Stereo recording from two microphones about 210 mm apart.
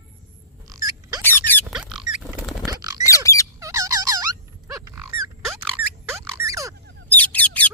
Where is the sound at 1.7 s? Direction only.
Centre (ahead or behind).